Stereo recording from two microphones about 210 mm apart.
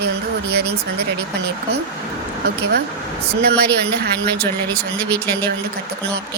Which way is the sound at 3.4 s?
50° right (ahead or behind).